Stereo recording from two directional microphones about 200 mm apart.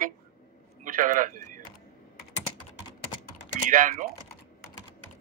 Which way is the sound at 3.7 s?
40° right (ahead or behind).